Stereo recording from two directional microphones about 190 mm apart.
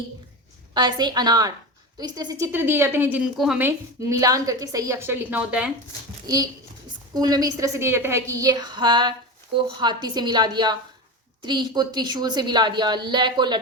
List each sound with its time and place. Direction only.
0.7 s a woman's voice: 20° right (ahead or behind); by 5.7 s 5° right (ahead or behind)
6.2 s a woman's voice: 20° right (ahead or behind)